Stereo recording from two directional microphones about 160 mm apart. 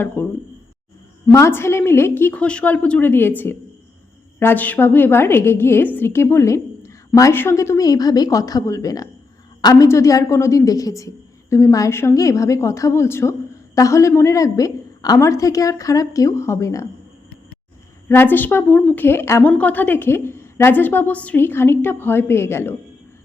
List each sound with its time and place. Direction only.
0.2 s a sound: 15° left (ahead or behind)
1.3 s a woman's voice: 15° left (ahead or behind)
18.1 s a woman's voice: 15° left (ahead or behind)
19.0 s a woman's voice: 15° left (ahead or behind)